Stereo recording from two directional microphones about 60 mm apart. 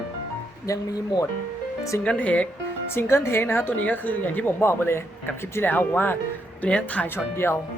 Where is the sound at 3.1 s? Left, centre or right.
Left.